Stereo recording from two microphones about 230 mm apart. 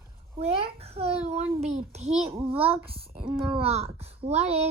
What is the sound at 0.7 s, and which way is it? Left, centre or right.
A woman's voice, right.